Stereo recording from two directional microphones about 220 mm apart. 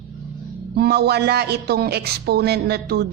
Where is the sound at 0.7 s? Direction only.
45° right (ahead or behind).